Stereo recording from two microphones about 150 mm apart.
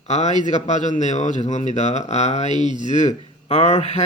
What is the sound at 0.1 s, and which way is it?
Speech, 50° left (ahead or behind).